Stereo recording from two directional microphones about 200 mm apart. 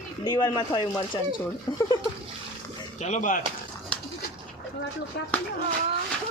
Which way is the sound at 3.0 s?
40° left (ahead or behind).